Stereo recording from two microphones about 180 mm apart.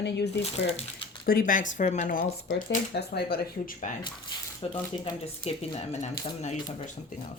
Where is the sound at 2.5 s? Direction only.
75° left (ahead or behind); by 3.8 s 60° left (ahead or behind).